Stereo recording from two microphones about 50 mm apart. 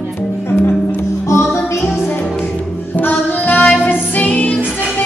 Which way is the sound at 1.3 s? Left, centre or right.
Left.